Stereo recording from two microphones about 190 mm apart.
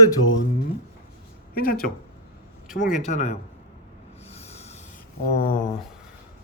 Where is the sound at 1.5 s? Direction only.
50° left (ahead or behind).